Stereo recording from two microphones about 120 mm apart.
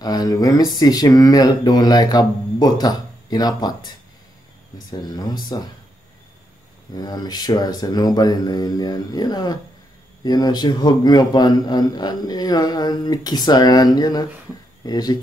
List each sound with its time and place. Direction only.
0.0 s a man's voice: 35° left (ahead or behind)
5.0 s a man's voice: 35° left (ahead or behind)
7.0 s a man's voice: 35° left (ahead or behind)